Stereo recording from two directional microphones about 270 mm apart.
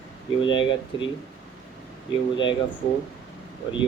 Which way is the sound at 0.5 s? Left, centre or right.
Centre.